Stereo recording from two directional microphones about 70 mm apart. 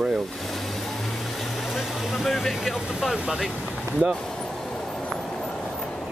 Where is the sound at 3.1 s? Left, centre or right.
Centre.